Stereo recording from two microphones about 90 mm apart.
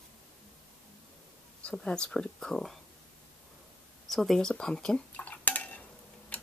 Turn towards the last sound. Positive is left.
turn(degrees=15)  # may be behind; listen again after turning